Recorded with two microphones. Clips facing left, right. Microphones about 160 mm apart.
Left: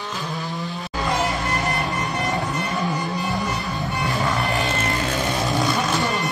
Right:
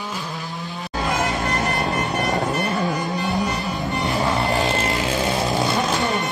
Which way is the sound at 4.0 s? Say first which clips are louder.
Right 2 dB; 25° right (ahead or behind).